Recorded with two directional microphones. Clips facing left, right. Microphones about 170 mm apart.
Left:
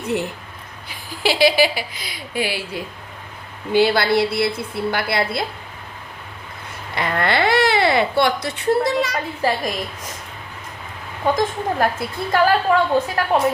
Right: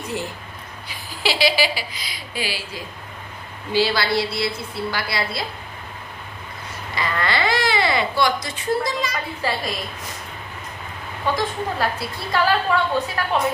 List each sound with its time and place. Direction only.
0.0 s speech: 65° left (ahead or behind)
0.9 s a woman's voice: 50° left (ahead or behind)
6.9 s speech: 60° left (ahead or behind)
9.4 s a woman's voice: 45° left (ahead or behind)
11.3 s a woman's voice: 50° left (ahead or behind)